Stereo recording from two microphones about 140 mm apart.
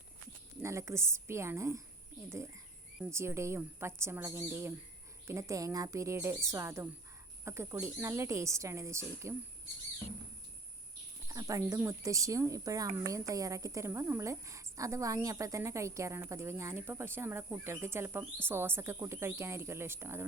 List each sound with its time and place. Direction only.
0.6 s a woman's voice: 20° right (ahead or behind)
3.0 s a woman's voice: 20° right (ahead or behind)
11.3 s a woman's voice: 25° right (ahead or behind)